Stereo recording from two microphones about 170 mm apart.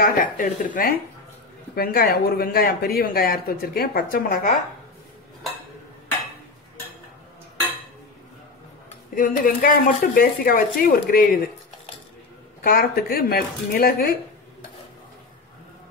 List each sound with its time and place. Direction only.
0.0 s speech: 55° left (ahead or behind)
9.1 s speech: 55° left (ahead or behind)
12.6 s speech: 60° left (ahead or behind)